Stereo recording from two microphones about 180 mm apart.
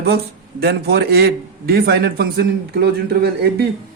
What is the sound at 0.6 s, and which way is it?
A man's voice, 60° right (ahead or behind).